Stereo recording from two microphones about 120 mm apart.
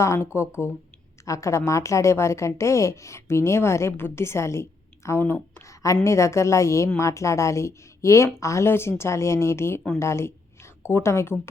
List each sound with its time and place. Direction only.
0.0 s a woman's voice: 25° left (ahead or behind)